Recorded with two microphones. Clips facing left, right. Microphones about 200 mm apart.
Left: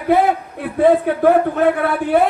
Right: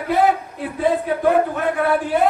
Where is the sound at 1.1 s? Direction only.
60° left (ahead or behind).